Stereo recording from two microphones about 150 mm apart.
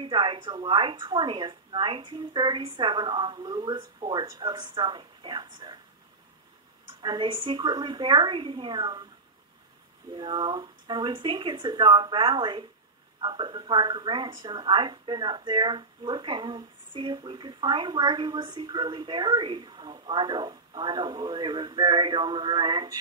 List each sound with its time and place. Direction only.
0.0 s a woman's voice: 35° right (ahead or behind)
7.0 s a woman's voice: 30° right (ahead or behind)
10.1 s a woman's voice: 30° right (ahead or behind)